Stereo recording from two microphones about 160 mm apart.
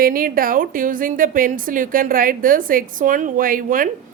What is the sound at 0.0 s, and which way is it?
A woman's voice, 65° right (ahead or behind).